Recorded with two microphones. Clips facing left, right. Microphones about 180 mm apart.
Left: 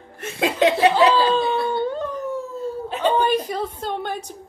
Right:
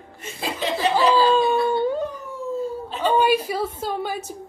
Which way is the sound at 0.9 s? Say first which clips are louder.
Left 1 dB; 10° right (ahead or behind).